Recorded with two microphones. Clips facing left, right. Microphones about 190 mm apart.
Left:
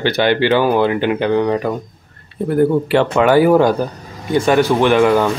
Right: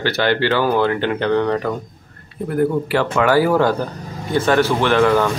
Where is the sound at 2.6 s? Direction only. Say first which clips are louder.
Left 4 dB; 25° left (ahead or behind).